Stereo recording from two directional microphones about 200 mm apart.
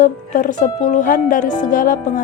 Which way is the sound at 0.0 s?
40° left (ahead or behind).